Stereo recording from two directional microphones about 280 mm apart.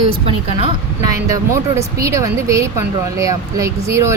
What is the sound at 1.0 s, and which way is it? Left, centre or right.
Speech, centre.